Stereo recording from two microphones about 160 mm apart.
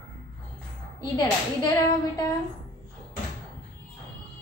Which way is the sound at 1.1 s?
25° left (ahead or behind).